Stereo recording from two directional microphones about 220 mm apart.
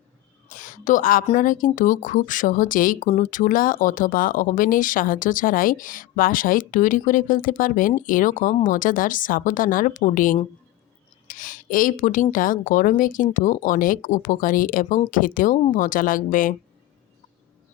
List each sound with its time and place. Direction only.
0.4 s a woman's voice: 35° left (ahead or behind)